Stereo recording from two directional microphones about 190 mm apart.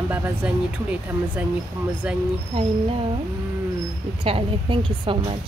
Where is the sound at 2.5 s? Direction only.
30° right (ahead or behind).